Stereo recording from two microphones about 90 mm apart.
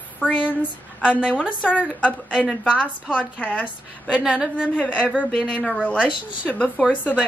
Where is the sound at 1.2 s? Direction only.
10° right (ahead or behind).